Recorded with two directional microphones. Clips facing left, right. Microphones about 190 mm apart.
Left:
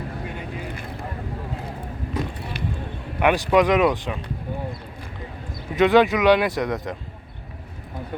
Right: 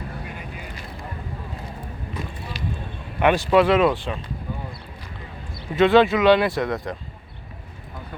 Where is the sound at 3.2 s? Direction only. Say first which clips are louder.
Right 1 dB; 15° left (ahead or behind).